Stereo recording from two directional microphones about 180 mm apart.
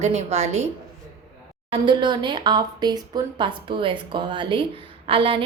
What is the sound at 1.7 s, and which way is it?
Speech, 25° right (ahead or behind).